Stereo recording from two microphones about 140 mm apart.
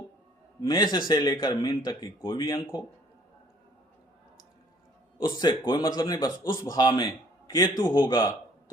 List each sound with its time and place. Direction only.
0.7 s speech: 30° left (ahead or behind)
5.1 s a man's voice: 30° left (ahead or behind)